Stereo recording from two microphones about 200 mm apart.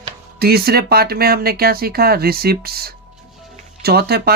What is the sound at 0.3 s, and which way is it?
Speech, 50° right (ahead or behind).